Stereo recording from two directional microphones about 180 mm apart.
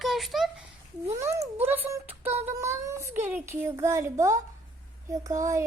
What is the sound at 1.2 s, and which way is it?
A woman's voice, 15° right (ahead or behind).